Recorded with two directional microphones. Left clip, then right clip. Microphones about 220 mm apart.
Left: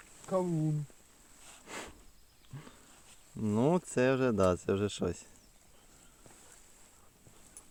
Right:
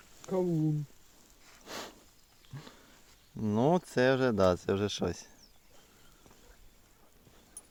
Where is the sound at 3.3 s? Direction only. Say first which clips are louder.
Right 2 dB; 5° right (ahead or behind).